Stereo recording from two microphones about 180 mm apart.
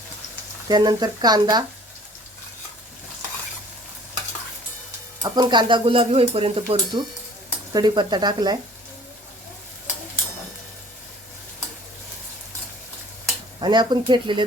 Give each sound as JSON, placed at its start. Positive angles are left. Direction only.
{"t": 0.7, "sound": "speech", "side_deg": -25}
{"t": 5.2, "sound": "speech", "side_deg": -25}
{"t": 13.6, "sound": "speech", "side_deg": -25}